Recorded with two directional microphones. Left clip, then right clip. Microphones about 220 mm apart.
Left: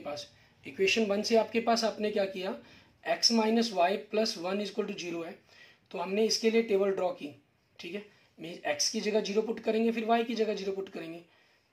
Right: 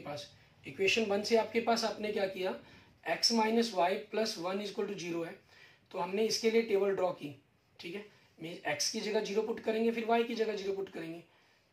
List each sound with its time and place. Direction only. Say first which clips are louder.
0.7 s speech: left 3 dB; 50° left (ahead or behind)
8.4 s speech: left 4 dB; 45° left (ahead or behind)